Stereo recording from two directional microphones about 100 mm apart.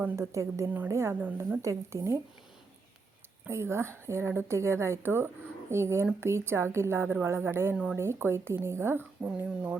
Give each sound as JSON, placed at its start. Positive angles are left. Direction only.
{"t": 0.2, "sound": "a woman's voice", "side_deg": -30}
{"t": 1.2, "sound": "speech", "side_deg": -15}
{"t": 1.6, "sound": "a woman's voice", "side_deg": -30}
{"t": 3.5, "sound": "a woman's voice", "side_deg": -25}
{"t": 9.2, "sound": "speech", "side_deg": -10}